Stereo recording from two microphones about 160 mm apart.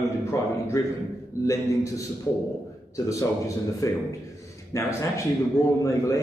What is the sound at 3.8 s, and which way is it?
A man's voice, 20° left (ahead or behind).